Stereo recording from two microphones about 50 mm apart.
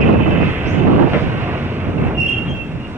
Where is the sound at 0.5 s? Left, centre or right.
Right.